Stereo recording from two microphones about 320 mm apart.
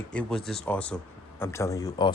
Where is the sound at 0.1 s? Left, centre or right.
Centre.